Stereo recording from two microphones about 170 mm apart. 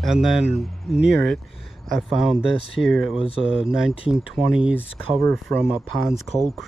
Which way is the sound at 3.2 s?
35° left (ahead or behind).